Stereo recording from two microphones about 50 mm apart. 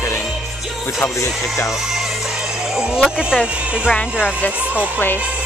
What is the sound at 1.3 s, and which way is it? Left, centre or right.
Speech, centre.